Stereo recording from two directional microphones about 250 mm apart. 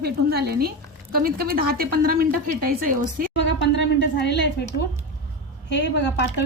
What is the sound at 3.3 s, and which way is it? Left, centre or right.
A woman's voice, left.